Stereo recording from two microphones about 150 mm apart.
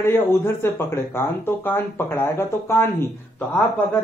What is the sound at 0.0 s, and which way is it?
Speech, 15° left (ahead or behind).